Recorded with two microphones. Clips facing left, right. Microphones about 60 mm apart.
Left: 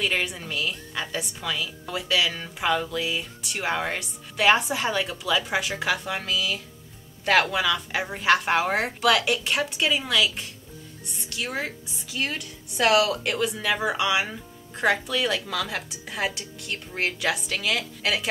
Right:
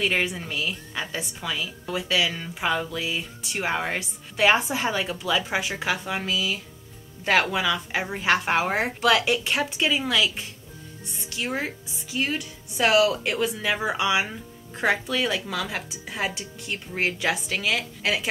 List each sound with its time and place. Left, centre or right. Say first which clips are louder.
0.0 s a woman's voice: right 2 dB; centre